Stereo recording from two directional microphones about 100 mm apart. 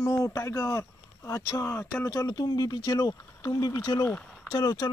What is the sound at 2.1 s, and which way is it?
Speech, 40° left (ahead or behind).